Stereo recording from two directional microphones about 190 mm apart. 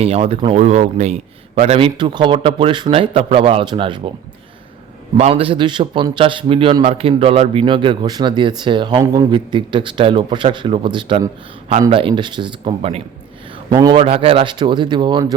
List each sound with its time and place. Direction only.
0.0 s a man's voice: 30° right (ahead or behind)
5.1 s a man's voice: 30° right (ahead or behind)